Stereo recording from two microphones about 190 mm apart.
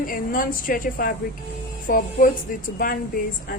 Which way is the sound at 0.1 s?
50° left (ahead or behind).